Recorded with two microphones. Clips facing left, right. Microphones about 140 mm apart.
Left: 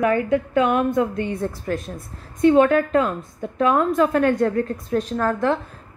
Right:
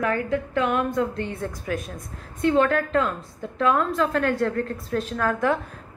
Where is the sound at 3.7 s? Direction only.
50° left (ahead or behind).